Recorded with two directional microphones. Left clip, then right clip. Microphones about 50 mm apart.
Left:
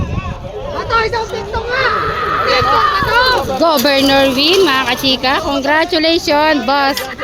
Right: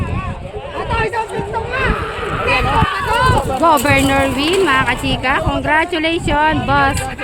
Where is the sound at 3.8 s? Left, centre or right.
Left.